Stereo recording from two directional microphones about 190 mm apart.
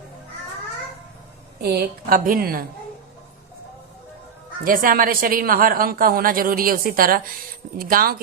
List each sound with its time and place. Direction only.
1.5 s a woman's voice: 55° right (ahead or behind)
4.6 s a woman's voice: 45° right (ahead or behind)